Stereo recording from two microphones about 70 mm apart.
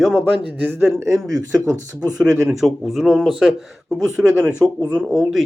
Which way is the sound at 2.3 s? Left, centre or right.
Centre.